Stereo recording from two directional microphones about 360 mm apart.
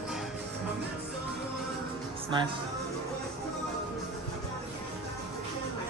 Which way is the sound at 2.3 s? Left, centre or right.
Centre.